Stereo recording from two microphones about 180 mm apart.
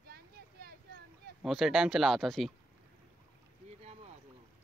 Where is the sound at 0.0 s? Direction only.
60° right (ahead or behind).